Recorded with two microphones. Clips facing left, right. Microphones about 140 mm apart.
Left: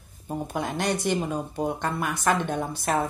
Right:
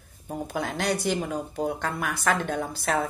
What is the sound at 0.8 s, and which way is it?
Speech, 10° right (ahead or behind).